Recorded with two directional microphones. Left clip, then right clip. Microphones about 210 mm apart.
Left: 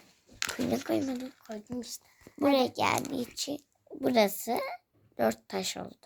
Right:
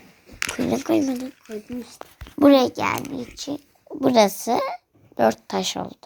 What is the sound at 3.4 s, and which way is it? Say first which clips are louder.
Speech: right 5 dB; 10° left (ahead or behind).